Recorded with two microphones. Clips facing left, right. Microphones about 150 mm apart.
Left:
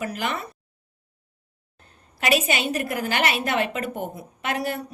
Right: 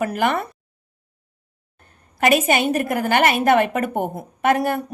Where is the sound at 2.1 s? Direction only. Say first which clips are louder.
Right 6 dB; 50° right (ahead or behind).